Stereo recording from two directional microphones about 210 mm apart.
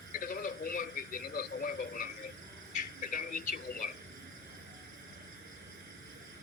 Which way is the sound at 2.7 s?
40° left (ahead or behind).